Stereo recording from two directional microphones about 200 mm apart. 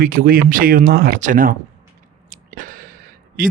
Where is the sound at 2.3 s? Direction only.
40° right (ahead or behind).